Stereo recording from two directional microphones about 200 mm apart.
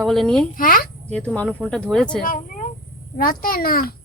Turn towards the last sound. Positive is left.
turn(degrees=45)  # may be behind; listen again after turning